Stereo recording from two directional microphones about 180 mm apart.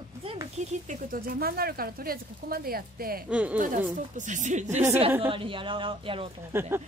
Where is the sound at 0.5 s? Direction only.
45° right (ahead or behind).